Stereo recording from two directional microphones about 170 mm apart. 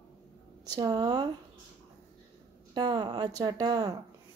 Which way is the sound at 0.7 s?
25° right (ahead or behind).